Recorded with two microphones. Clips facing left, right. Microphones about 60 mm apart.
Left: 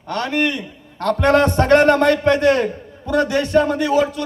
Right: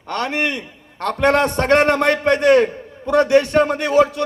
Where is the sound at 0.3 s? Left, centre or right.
Right.